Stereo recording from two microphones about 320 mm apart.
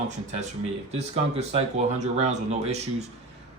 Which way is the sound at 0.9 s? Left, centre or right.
Centre.